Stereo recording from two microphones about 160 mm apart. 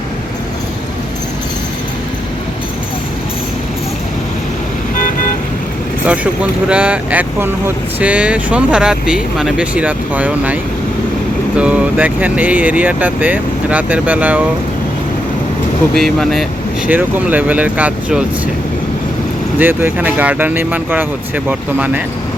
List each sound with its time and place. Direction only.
4.9 s vehicle: 60° left (ahead or behind)
6.1 s speech: 10° right (ahead or behind)
16.0 s speech: centre (ahead or behind)
19.5 s speech: 10° right (ahead or behind)